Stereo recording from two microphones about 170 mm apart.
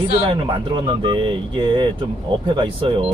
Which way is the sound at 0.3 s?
30° right (ahead or behind).